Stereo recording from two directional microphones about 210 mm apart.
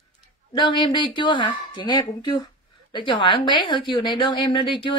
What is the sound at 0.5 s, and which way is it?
A woman's voice, 20° left (ahead or behind).